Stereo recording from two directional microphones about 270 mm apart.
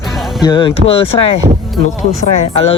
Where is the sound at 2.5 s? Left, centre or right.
Left.